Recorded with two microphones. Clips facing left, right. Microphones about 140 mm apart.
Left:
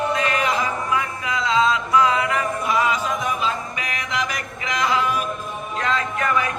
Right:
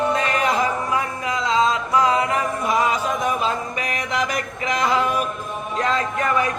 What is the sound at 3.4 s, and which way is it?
Music, 45° right (ahead or behind).